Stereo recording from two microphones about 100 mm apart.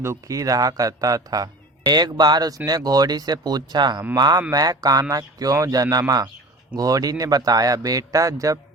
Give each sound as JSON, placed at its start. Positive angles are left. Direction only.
{"t": 0.0, "sound": "a man's voice", "side_deg": -30}